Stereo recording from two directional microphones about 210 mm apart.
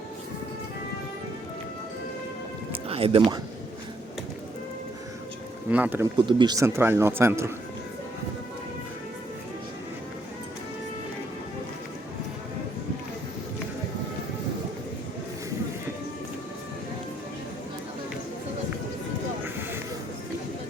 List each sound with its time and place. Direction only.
2.7 s speech: 25° right (ahead or behind)
5.6 s a man's voice: 10° right (ahead or behind)
6.1 s a man's voice: 20° right (ahead or behind)